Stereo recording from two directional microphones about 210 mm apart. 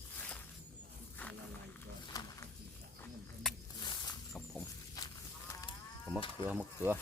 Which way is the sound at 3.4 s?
Centre (ahead or behind).